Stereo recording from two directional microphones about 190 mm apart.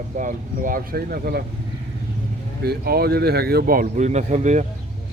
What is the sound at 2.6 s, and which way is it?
A man's voice, 55° right (ahead or behind).